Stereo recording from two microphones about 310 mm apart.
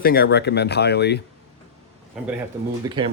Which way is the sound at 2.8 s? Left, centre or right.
Centre.